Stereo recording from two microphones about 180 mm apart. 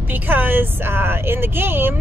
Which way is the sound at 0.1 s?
10° right (ahead or behind).